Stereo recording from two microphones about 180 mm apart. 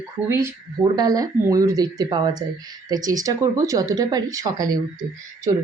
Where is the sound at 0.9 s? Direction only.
20° right (ahead or behind).